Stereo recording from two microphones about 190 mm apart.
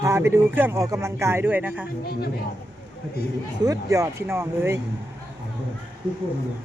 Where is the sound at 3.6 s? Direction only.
20° right (ahead or behind).